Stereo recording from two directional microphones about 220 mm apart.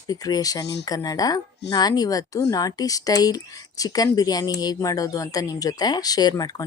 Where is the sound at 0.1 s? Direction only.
15° left (ahead or behind).